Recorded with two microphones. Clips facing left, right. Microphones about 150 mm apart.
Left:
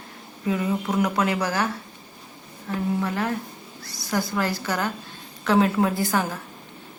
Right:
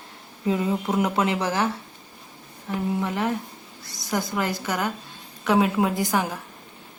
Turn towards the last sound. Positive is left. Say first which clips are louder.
# even
turn(degrees=-15)  # may be behind; listen again after turning